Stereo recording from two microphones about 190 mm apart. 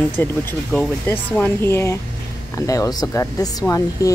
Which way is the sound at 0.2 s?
10° left (ahead or behind).